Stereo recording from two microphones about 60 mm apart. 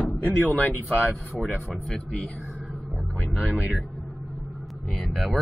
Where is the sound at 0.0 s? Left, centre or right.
Left.